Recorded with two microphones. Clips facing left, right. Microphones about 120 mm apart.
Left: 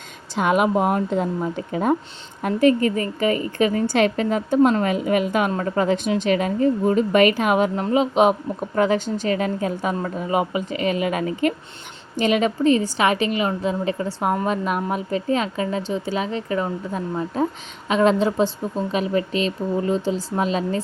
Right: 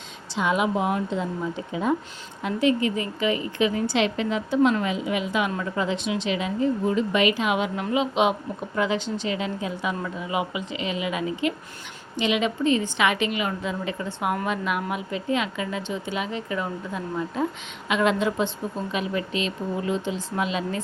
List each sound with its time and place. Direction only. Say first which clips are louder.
0.3 s a woman's voice: left 5 dB; 55° left (ahead or behind); by 20.8 s 35° left (ahead or behind)